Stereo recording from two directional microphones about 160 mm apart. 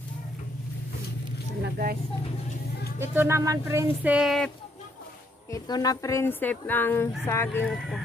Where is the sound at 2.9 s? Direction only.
15° right (ahead or behind).